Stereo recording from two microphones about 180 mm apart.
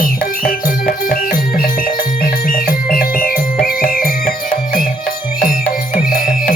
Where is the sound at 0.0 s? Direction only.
55° left (ahead or behind).